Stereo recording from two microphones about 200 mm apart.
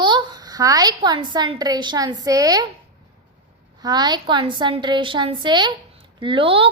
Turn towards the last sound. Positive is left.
turn(degrees=-25)  # may be behind; listen again after turning